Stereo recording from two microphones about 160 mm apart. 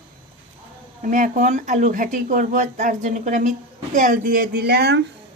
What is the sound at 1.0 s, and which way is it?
Speech, 55° right (ahead or behind).